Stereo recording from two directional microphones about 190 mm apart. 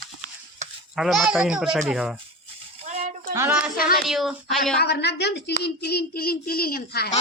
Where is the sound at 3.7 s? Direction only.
50° left (ahead or behind).